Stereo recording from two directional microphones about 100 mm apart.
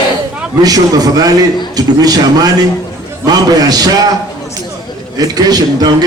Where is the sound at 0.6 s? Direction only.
40° right (ahead or behind).